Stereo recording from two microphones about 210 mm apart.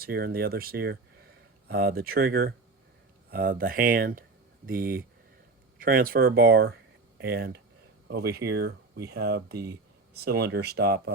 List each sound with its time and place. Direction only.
0.0 s speech: 45° right (ahead or behind)